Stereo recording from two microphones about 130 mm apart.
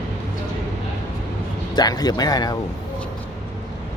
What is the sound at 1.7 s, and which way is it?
Speech, 30° left (ahead or behind).